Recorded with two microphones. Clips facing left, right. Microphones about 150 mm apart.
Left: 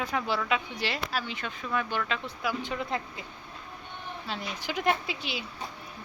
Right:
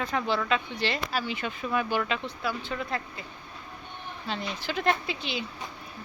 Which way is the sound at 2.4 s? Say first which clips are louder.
Left 1 dB; 15° left (ahead or behind).